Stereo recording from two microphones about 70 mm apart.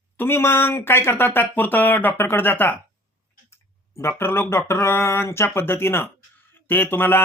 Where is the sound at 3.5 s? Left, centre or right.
Left.